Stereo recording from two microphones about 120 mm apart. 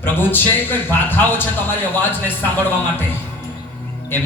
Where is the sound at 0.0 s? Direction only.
15° left (ahead or behind).